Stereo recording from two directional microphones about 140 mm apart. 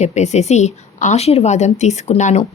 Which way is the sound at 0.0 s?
55° left (ahead or behind).